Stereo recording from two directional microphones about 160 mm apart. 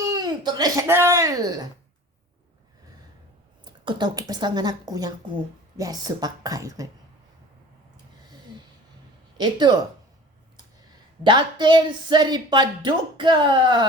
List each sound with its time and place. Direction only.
0.0 s speech: 25° right (ahead or behind)
3.6 s speech: 30° right (ahead or behind)
9.4 s speech: 25° right (ahead or behind)
11.2 s speech: 30° right (ahead or behind)